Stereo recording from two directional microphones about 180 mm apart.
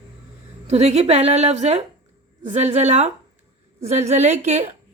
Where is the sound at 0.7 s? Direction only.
35° right (ahead or behind).